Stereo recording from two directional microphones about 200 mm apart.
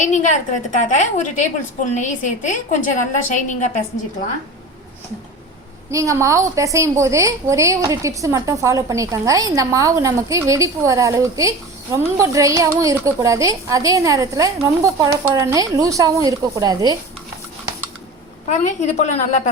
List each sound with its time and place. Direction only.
0.0 s a woman's voice: 40° left (ahead or behind)
5.9 s a woman's voice: 15° right (ahead or behind)
18.4 s a woman's voice: 35° left (ahead or behind)